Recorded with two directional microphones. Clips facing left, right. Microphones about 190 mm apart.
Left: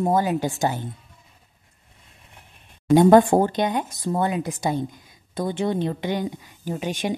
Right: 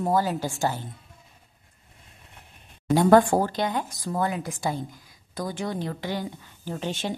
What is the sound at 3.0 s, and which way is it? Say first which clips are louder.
Speech: left 4 dB; 20° left (ahead or behind).